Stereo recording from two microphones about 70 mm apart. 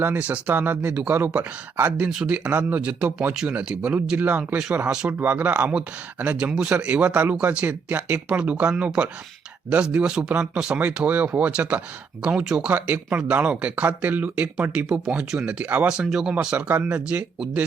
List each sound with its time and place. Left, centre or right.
0.0 s speech: right
1.7 s speech: right
2.0 s speech: centre
2.3 s speech: right
3.3 s speech: centre
5.0 s speech: right
6.3 s speech: centre
14.8 s speech: centre
15.5 s speech: right
16.0 s speech: centre
16.6 s speech: right